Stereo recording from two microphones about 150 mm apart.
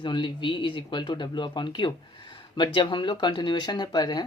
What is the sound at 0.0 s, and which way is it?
Speech, 30° left (ahead or behind).